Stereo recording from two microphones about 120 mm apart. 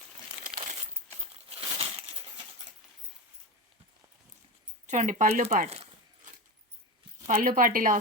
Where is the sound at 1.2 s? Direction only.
50° right (ahead or behind).